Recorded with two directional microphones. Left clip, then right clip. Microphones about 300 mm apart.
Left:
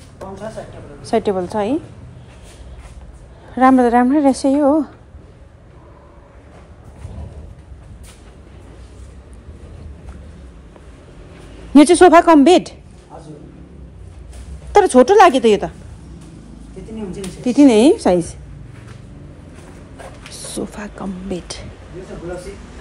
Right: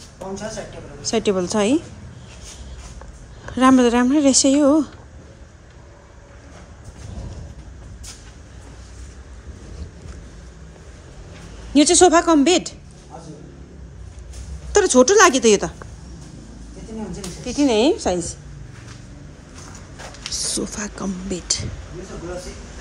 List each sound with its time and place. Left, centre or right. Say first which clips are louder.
1.0 s speech: left 2 dB; centre
3.5 s speech: left 3 dB; centre
11.7 s speech: left 5 dB; centre
14.7 s speech: left 4 dB; centre
17.5 s speech: left 6 dB; centre
20.3 s speech: right 2 dB; centre